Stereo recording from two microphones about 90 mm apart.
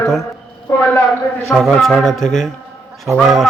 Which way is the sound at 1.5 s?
5° left (ahead or behind).